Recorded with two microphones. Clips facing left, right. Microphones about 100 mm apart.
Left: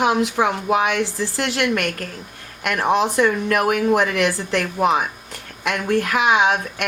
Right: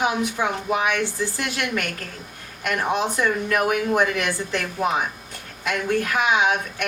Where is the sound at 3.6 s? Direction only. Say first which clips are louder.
Left 3 dB; 55° left (ahead or behind).